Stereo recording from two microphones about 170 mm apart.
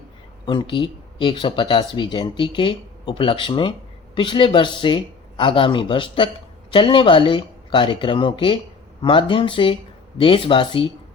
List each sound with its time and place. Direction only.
0.4 s speech: 30° left (ahead or behind)